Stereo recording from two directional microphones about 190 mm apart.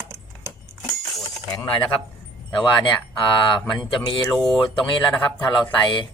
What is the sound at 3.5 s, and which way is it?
Speech, 25° left (ahead or behind).